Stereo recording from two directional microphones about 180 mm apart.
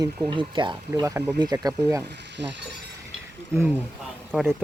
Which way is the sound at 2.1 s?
75° right (ahead or behind).